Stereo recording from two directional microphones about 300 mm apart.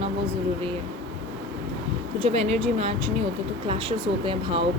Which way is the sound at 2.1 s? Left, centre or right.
Centre.